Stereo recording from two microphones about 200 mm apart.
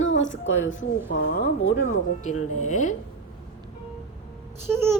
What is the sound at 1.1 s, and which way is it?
Speech, 55° left (ahead or behind).